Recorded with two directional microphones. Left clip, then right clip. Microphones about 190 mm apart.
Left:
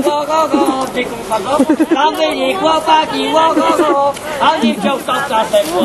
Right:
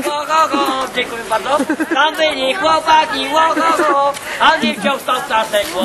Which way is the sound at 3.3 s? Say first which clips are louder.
Left 2 dB; 45° right (ahead or behind).